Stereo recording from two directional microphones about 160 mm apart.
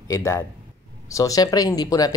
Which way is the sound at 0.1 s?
15° left (ahead or behind).